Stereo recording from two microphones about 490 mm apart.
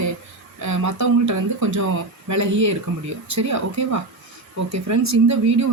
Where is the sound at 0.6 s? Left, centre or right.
Right.